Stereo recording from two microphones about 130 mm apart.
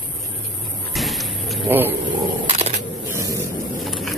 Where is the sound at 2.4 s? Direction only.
55° right (ahead or behind).